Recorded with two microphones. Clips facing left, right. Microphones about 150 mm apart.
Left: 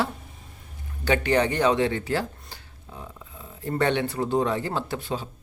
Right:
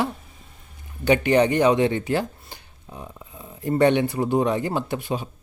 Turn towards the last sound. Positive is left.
turn(degrees=-15)  # may be behind; listen again after turning